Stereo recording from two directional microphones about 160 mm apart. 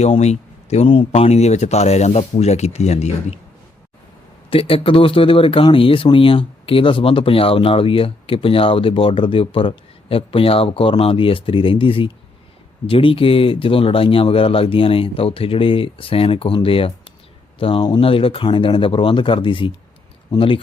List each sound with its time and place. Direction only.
0.0 s speech: 45° left (ahead or behind)
4.4 s speech: 35° left (ahead or behind)